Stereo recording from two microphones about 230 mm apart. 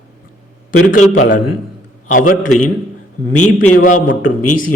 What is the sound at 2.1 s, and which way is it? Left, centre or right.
Speech, left.